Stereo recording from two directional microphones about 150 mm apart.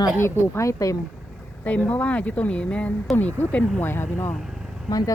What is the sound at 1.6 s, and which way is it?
Speech, 10° left (ahead or behind).